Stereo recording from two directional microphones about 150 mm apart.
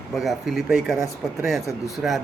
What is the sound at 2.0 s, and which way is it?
Speech, centre (ahead or behind).